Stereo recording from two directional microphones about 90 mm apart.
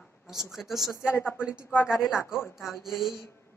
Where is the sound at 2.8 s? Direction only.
Centre (ahead or behind).